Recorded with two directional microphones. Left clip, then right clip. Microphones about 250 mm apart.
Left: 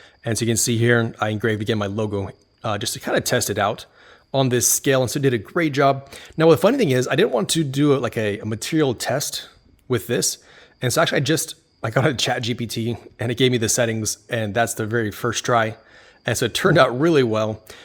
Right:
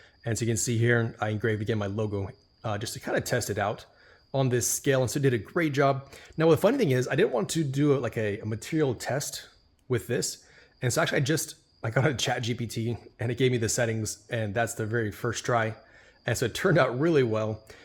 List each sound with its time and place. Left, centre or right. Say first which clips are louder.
0.3 s a man's voice: left 8 dB; left